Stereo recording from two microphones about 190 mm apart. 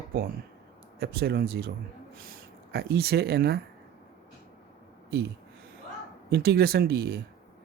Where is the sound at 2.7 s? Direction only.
55° right (ahead or behind).